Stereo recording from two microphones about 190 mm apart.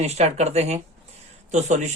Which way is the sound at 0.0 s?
35° right (ahead or behind).